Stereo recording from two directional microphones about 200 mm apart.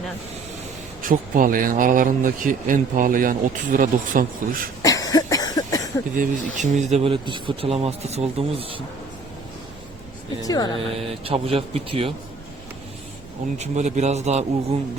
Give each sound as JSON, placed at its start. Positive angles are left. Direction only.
{"t": 1.0, "sound": "a man's voice", "side_deg": -45}
{"t": 4.8, "sound": "cough", "side_deg": 15}
{"t": 6.1, "sound": "speech", "side_deg": -35}
{"t": 10.4, "sound": "speech", "side_deg": 20}
{"t": 10.8, "sound": "speech", "side_deg": -30}
{"t": 13.6, "sound": "a man's voice", "side_deg": -35}